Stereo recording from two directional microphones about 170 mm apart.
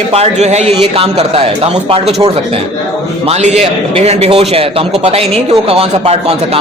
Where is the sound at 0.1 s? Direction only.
40° right (ahead or behind).